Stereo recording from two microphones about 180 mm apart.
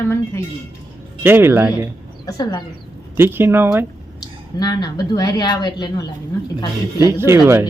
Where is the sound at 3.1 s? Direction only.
10° right (ahead or behind).